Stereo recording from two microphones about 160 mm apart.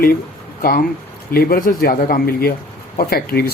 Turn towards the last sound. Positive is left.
turn(degrees=70)  # may be behind; listen again after turning